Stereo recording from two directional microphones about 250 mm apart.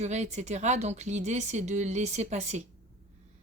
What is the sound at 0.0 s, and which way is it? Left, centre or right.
Speech, right.